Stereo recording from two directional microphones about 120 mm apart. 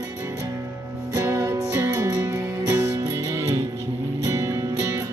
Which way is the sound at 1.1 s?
25° right (ahead or behind).